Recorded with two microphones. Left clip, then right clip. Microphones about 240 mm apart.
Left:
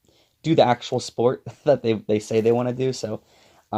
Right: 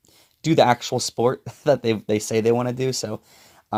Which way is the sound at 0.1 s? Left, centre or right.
Right.